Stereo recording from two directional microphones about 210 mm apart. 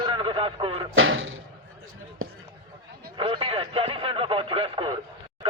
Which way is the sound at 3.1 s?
25° right (ahead or behind).